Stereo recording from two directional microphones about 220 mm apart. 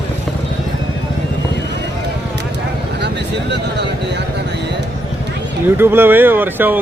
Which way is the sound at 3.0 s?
50° right (ahead or behind).